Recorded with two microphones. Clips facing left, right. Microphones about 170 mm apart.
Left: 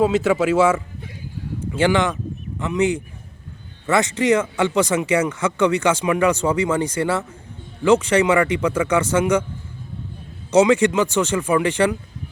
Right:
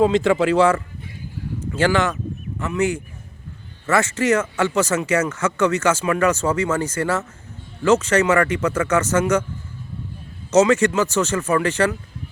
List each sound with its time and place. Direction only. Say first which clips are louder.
0.0 s speech: right 1 dB; 5° left (ahead or behind)
10.5 s speech: left 1 dB; 10° left (ahead or behind)